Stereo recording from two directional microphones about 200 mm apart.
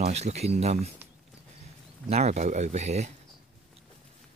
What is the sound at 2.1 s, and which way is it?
Speech, 35° right (ahead or behind).